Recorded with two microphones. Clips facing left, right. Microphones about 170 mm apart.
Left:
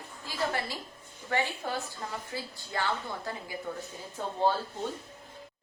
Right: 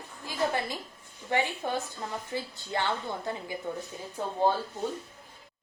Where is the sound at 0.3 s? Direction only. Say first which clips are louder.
Right 3 dB; 20° right (ahead or behind).